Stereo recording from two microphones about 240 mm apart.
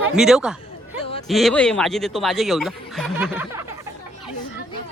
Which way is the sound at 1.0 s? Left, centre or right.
Left.